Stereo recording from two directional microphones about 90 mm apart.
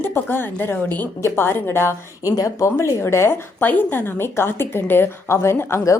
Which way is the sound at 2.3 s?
40° left (ahead or behind).